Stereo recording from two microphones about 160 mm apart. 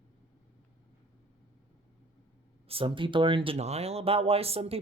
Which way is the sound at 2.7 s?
35° right (ahead or behind).